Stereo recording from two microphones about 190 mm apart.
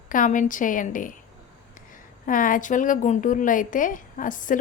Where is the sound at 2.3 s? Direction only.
45° left (ahead or behind).